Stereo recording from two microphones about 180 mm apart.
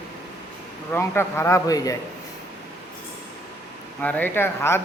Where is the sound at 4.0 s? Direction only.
10° left (ahead or behind).